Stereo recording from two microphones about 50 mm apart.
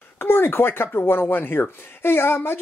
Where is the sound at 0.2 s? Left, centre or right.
Left.